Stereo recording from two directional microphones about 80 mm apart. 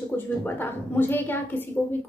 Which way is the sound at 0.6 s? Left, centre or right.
Left.